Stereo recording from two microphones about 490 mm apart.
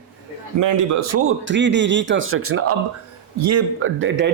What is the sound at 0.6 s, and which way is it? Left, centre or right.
Speech, right.